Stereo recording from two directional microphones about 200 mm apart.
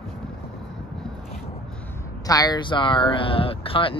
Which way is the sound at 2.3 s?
20° left (ahead or behind).